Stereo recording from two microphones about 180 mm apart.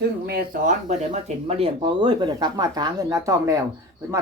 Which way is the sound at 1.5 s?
35° right (ahead or behind).